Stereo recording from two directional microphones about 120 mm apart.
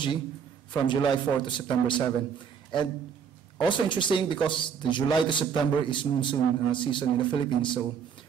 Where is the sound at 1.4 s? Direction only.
40° left (ahead or behind).